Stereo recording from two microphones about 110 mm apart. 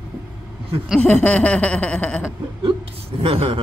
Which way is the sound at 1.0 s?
10° left (ahead or behind).